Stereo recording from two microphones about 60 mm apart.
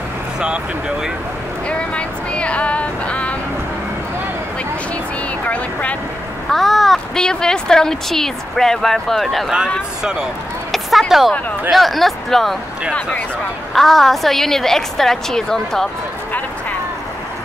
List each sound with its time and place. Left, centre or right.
0.4 s speech: centre
1.7 s female singing: centre
5.4 s speech: left
6.5 s a woman's voice: centre
10.7 s a woman's voice: centre
13.7 s a woman's voice: centre